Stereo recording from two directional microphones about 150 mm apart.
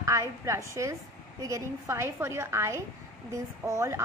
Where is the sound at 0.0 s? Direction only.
20° right (ahead or behind).